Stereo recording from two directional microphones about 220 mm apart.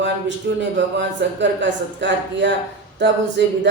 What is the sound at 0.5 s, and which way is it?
Speech, 55° right (ahead or behind).